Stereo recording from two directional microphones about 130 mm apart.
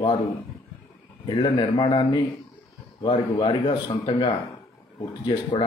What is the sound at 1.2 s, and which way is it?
Speech, 40° left (ahead or behind).